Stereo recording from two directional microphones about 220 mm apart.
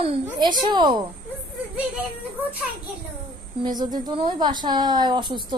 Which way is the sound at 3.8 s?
20° right (ahead or behind).